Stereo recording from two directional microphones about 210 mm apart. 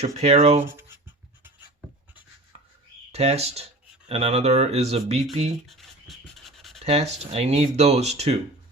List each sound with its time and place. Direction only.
0.0 s speech: 30° right (ahead or behind)
3.1 s speech: 30° right (ahead or behind)
5.6 s dog: centre (ahead or behind)
6.7 s speech: 30° right (ahead or behind)